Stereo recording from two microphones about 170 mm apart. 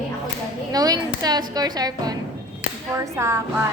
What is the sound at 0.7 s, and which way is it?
A woman's voice, 20° right (ahead or behind).